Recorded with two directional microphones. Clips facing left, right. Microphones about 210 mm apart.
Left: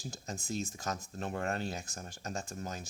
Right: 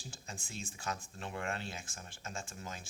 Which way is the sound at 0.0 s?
40° left (ahead or behind).